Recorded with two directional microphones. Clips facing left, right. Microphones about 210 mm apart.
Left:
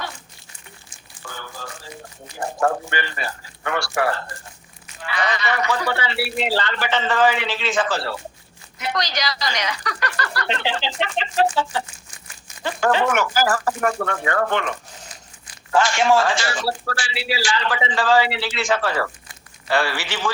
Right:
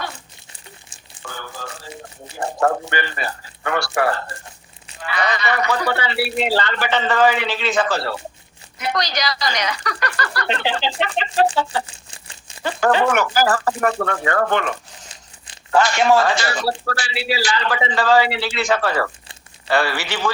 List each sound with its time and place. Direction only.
2.3 s a man's voice: 65° right (ahead or behind)
5.0 s speech: 40° right (ahead or behind)
5.3 s a man's voice: 60° right (ahead or behind)
11.4 s crumpling: 30° right (ahead or behind)
12.8 s a man's voice: 55° right (ahead or behind)
15.7 s a man's voice: 60° right (ahead or behind)